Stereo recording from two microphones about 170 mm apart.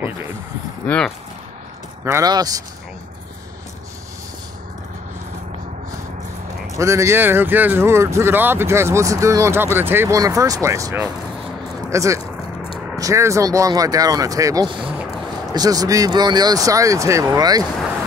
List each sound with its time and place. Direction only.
0.8 s speech: 5° left (ahead or behind)
2.0 s speech: 20° right (ahead or behind)
6.8 s speech: 15° right (ahead or behind)